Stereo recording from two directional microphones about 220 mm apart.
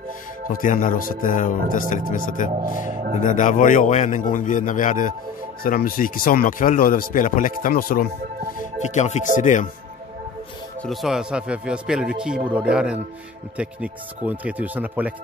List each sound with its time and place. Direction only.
0.5 s speech: 40° left (ahead or behind)
10.8 s speech: centre (ahead or behind)